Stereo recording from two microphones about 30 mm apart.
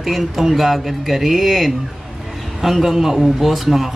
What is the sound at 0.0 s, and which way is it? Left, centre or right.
Speech, centre.